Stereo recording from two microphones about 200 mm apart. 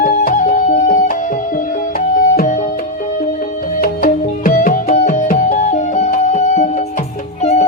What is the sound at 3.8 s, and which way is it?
Music, 45° left (ahead or behind).